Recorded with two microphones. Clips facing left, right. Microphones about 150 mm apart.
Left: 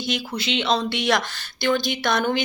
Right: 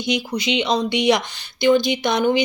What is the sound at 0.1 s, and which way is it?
A woman's voice, 15° right (ahead or behind).